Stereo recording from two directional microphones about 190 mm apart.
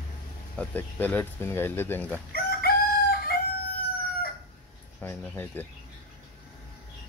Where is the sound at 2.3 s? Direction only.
55° left (ahead or behind).